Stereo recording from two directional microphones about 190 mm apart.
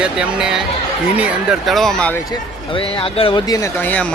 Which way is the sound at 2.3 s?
30° left (ahead or behind).